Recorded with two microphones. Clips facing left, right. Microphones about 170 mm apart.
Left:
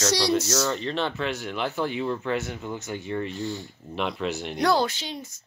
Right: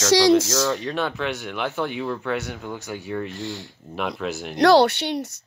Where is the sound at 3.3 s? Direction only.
90° right.